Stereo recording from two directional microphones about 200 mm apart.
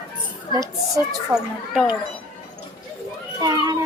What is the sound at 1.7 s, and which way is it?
Speech, centre (ahead or behind).